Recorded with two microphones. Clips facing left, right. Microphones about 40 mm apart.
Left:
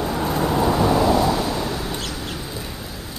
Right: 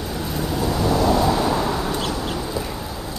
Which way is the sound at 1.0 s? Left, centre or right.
Centre.